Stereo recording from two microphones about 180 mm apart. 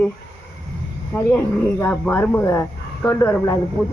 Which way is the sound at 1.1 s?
10° left (ahead or behind).